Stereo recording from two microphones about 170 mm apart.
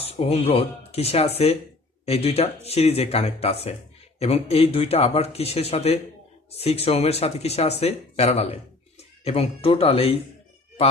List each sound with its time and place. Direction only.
0.1 s speech: 35° left (ahead or behind)